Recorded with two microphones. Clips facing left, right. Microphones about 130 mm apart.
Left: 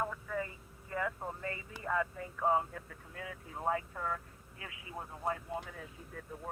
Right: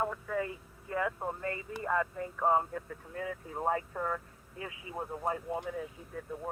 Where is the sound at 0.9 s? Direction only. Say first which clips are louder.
Right 4 dB; 50° right (ahead or behind); by 5.4 s 25° right (ahead or behind).